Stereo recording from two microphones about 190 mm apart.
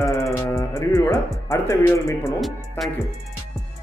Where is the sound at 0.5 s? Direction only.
15° left (ahead or behind).